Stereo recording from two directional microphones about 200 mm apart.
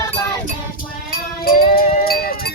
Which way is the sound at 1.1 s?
50° left (ahead or behind).